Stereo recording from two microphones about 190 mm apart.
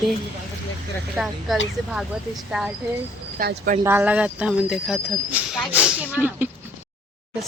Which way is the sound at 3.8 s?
10° right (ahead or behind).